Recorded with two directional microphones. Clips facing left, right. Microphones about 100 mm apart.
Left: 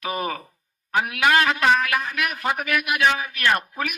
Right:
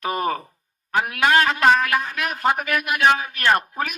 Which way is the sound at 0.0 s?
40° right (ahead or behind).